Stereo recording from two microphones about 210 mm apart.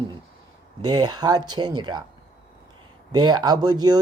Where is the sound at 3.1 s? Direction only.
20° right (ahead or behind).